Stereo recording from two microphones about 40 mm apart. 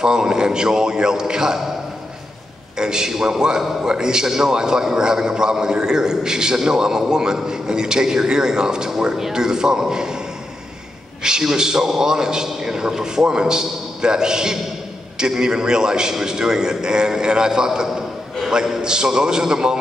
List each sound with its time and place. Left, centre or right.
0.0 s a man's voice: centre
2.8 s a man's voice: centre
11.2 s a man's voice: centre